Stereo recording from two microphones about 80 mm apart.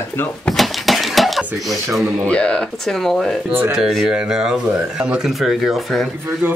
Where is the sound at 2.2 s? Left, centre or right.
Centre.